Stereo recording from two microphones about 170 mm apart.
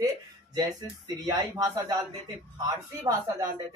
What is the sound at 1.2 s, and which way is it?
Speech, 20° right (ahead or behind).